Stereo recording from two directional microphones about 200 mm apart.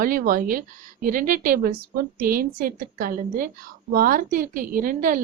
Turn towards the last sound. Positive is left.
turn(degrees=-45)  # may be behind; listen again after turning